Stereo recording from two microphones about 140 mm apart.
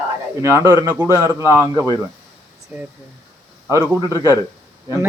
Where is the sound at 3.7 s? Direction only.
25° left (ahead or behind).